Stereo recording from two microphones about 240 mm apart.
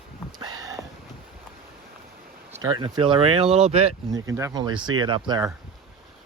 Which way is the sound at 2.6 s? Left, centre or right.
Centre.